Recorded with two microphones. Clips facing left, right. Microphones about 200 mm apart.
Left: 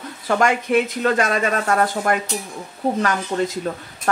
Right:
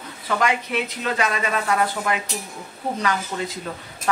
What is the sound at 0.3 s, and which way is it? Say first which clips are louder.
Speech: left 5 dB; 50° left (ahead or behind).